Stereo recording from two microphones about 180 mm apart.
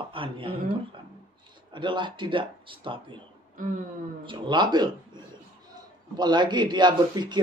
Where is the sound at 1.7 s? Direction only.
25° right (ahead or behind).